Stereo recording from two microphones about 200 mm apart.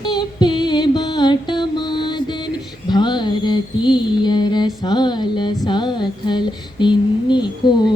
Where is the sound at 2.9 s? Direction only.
20° left (ahead or behind).